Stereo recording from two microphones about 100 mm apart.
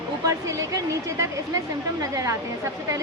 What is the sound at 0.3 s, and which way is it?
Speech, 35° right (ahead or behind).